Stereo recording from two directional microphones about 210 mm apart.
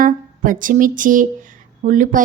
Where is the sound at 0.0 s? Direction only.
40° right (ahead or behind).